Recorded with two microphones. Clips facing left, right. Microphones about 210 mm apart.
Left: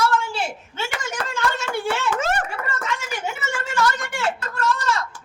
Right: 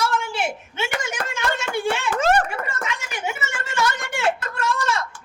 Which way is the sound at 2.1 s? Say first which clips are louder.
Right 4 dB; 40° right (ahead or behind).